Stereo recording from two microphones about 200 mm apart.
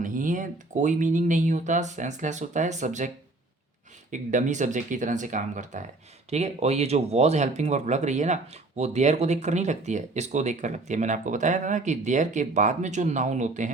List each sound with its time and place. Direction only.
0.0 s speech: 40° right (ahead or behind)
4.1 s speech: 40° right (ahead or behind)